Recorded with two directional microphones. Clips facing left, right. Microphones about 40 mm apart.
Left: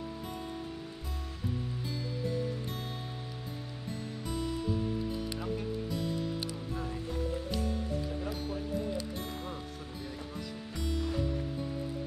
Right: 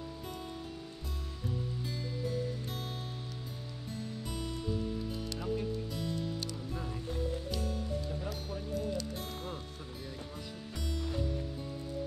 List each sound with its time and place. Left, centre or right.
5.9 s music: centre
7.5 s music: centre